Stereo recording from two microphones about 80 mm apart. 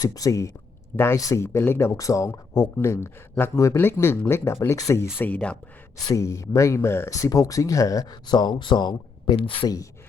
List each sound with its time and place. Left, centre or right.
0.0 s speech: left
1.9 s speech: left
5.1 s speech: left
6.1 s speech: left
7.1 s speech: left